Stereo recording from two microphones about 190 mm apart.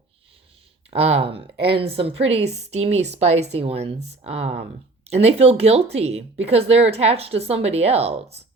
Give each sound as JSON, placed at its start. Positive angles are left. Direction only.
{"t": 0.9, "sound": "a woman's voice", "side_deg": -30}